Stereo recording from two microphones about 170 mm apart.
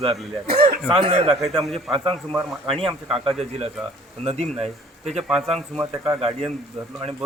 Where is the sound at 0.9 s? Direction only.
35° right (ahead or behind).